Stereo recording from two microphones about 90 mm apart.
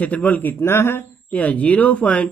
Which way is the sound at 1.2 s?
15° left (ahead or behind).